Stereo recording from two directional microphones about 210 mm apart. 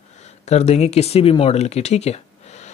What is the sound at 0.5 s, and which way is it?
Speech, 30° left (ahead or behind).